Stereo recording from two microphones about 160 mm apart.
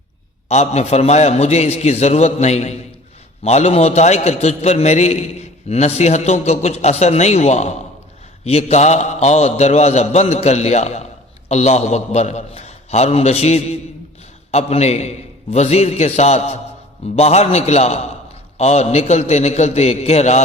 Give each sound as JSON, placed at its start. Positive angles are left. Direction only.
{"t": 0.4, "sound": "a man's voice", "side_deg": 40}